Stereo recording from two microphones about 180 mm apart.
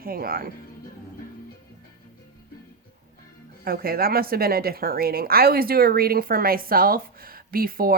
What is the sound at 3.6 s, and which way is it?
Speech, 55° right (ahead or behind).